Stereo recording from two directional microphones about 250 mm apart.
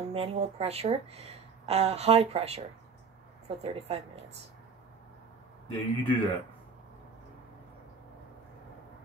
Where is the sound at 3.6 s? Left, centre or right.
Right.